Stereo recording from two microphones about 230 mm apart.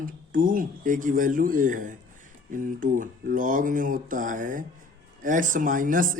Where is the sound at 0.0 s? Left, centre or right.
Right.